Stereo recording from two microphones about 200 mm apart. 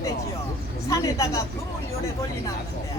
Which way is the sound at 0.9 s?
15° left (ahead or behind).